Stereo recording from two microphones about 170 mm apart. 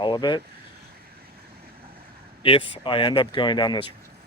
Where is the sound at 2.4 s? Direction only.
30° left (ahead or behind).